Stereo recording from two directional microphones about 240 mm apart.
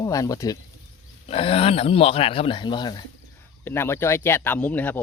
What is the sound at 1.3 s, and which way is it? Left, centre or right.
Speech, left.